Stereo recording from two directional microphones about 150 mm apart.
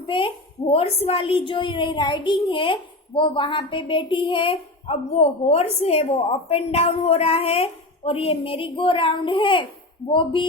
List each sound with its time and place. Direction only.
0.1 s a woman's voice: 35° left (ahead or behind)